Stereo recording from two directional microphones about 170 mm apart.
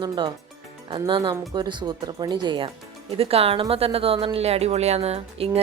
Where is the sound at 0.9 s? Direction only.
30° right (ahead or behind).